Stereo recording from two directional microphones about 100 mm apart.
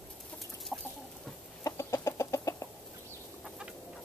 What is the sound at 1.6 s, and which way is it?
Chicken, 30° left (ahead or behind).